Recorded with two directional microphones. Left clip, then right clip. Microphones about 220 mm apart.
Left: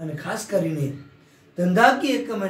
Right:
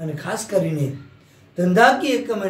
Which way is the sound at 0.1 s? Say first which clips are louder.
Right 3 dB; 20° right (ahead or behind).